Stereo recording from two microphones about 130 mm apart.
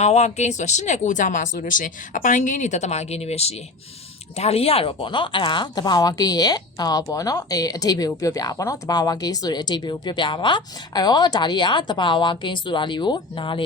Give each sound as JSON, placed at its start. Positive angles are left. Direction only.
{"t": 0.0, "sound": "speech", "side_deg": 60}